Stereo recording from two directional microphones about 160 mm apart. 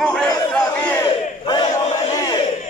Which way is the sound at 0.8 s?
10° left (ahead or behind).